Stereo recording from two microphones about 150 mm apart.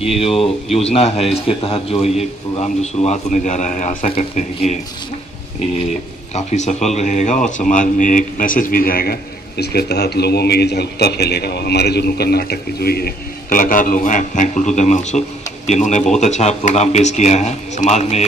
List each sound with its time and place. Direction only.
0.2 s speech: 40° left (ahead or behind); by 4.1 s 55° left (ahead or behind)
4.1 s speech: 40° left (ahead or behind)
6.3 s speech: 50° left (ahead or behind); by 9.1 s 75° left (ahead or behind)
9.6 s speech: 90° left; by 18.2 s 45° left (ahead or behind)